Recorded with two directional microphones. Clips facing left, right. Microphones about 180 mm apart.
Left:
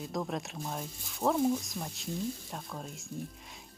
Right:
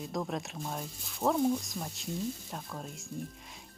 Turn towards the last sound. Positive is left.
turn(degrees=0)  # may be behind; listen again after turning